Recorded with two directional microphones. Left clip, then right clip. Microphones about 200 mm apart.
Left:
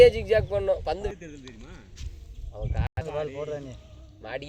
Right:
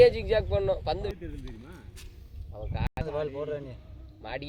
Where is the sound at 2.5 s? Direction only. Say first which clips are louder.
Left 1 dB; 40° left (ahead or behind).